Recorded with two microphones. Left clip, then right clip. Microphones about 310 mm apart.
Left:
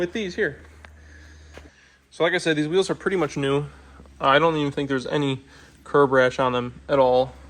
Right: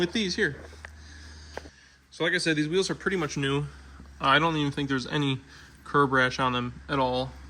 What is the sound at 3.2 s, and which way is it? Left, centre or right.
Speech, centre.